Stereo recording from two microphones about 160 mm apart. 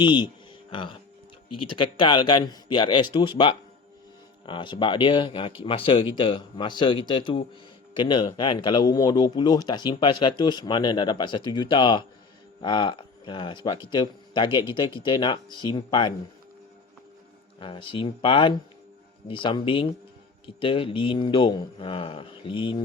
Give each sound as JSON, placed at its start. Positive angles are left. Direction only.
{"t": 0.0, "sound": "speech", "side_deg": 30}
{"t": 17.6, "sound": "speech", "side_deg": 30}